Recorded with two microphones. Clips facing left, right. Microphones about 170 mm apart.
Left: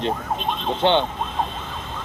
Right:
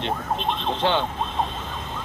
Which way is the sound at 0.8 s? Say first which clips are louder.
Left 5 dB; 25° left (ahead or behind).